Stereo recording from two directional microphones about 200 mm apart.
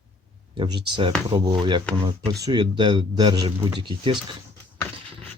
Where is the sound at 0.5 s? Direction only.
25° right (ahead or behind).